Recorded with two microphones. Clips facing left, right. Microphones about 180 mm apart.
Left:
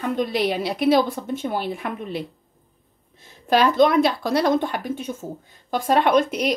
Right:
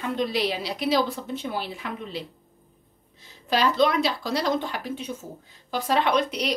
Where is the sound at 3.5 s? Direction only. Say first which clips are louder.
Left 5 dB; 50° left (ahead or behind).